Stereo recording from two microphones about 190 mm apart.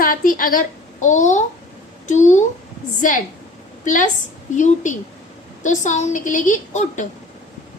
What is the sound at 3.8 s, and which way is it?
A woman's voice, 40° left (ahead or behind).